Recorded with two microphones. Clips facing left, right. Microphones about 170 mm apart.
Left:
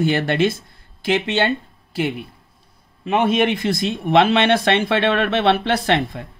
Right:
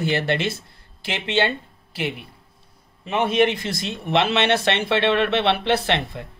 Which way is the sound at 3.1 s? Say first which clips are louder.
Left 2 dB; 55° left (ahead or behind).